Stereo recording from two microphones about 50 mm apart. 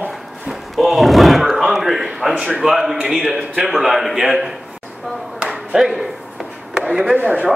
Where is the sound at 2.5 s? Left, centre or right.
Centre.